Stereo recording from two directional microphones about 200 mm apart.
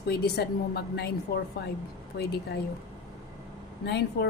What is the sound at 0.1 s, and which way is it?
A woman's voice, 50° left (ahead or behind).